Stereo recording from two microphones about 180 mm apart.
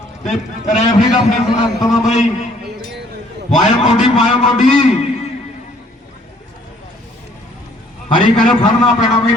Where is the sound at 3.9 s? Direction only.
35° left (ahead or behind).